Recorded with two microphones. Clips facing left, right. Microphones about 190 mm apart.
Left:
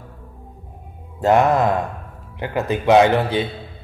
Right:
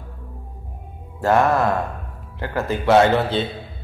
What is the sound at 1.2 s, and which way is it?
Speech, 20° left (ahead or behind).